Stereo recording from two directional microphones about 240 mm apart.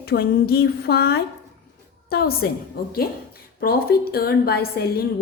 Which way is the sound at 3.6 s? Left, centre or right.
Left.